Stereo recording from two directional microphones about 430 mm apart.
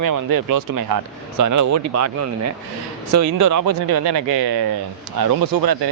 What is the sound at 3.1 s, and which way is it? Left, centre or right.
Speech, right.